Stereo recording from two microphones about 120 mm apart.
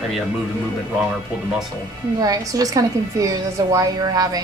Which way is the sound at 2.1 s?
30° right (ahead or behind).